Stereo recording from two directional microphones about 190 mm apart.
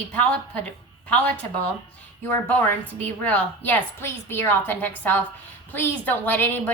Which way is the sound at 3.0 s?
10° left (ahead or behind).